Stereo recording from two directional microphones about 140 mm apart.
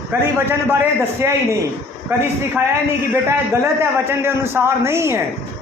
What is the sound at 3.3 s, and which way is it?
A man's voice, 15° right (ahead or behind).